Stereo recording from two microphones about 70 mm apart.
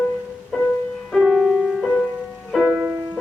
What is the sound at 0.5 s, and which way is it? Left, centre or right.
Music, centre.